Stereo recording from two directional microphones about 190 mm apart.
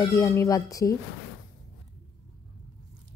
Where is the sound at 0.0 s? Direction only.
15° left (ahead or behind).